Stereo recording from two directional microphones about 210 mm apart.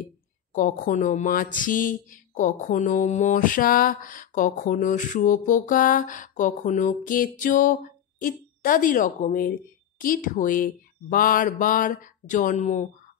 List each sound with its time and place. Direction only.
0.5 s speech: 40° left (ahead or behind)